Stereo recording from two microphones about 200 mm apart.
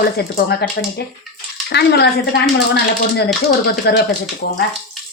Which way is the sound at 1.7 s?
55° left (ahead or behind).